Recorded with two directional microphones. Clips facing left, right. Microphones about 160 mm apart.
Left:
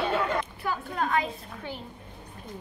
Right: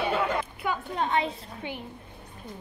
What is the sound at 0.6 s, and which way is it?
A woman's voice, 25° right (ahead or behind).